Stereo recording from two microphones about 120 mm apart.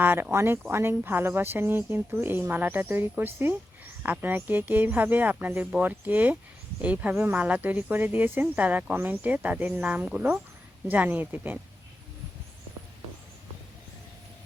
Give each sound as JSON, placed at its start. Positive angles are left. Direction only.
{"t": 0.0, "sound": "speech", "side_deg": -20}